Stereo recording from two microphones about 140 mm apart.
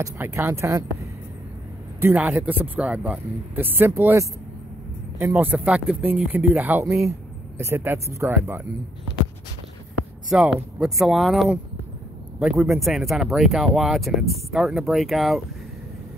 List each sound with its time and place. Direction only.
0.0 s speech: 15° right (ahead or behind)
2.0 s speech: 15° right (ahead or behind)
10.3 s speech: 5° right (ahead or behind)